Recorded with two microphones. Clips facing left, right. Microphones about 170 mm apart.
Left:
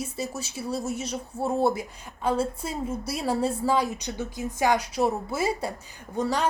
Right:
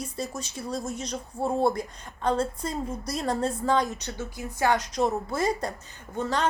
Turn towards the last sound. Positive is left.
turn(degrees=10)  # may be behind; listen again after turning